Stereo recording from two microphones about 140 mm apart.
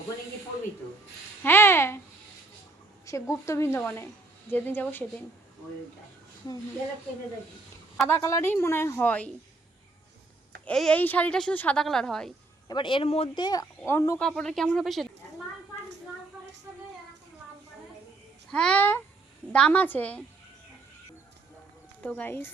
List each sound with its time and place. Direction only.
1.5 s babbling: 15° left (ahead or behind)
3.1 s a woman's voice: 20° left (ahead or behind)
8.0 s a woman's voice: 15° left (ahead or behind)
10.7 s a woman's voice: 5° left (ahead or behind)
12.6 s speech: 35° left (ahead or behind)
13.4 s speech: 25° left (ahead or behind)
14.2 s a woman's voice: 5° left (ahead or behind)
16.7 s child singing: 10° right (ahead or behind)
18.5 s a woman's voice: 5° left (ahead or behind)
22.0 s a woman's voice: 10° left (ahead or behind)